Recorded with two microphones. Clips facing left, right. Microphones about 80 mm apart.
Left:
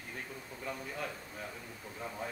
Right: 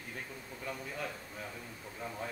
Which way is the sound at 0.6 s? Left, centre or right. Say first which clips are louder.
Even; centre.